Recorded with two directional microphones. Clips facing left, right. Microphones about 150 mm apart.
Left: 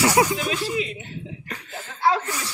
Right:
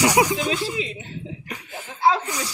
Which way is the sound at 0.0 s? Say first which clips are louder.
Right 1 dB; 15° right (ahead or behind).